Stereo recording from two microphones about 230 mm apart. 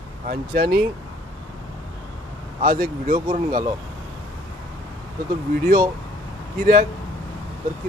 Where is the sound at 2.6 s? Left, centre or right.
Right.